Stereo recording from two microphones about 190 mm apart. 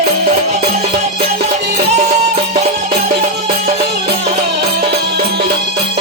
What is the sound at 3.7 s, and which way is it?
Music, 60° right (ahead or behind).